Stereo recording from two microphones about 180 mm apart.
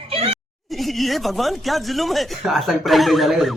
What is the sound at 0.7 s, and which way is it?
Speech, centre (ahead or behind).